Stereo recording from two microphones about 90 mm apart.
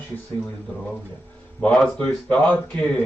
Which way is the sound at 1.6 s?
10° left (ahead or behind).